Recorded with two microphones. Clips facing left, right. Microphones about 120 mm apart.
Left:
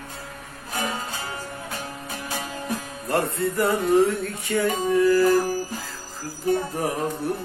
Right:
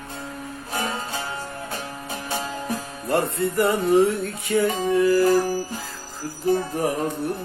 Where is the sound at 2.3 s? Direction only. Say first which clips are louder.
Right 3 dB; 30° right (ahead or behind).